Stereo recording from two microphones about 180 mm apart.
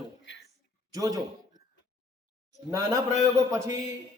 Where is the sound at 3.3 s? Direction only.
15° right (ahead or behind).